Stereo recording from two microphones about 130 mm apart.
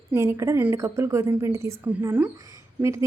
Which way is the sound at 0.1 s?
20° right (ahead or behind).